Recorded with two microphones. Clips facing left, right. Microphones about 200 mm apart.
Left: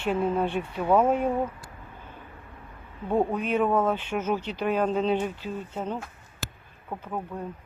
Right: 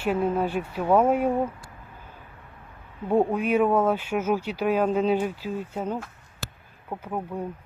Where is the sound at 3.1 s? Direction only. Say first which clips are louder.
Right 3 dB; 10° right (ahead or behind).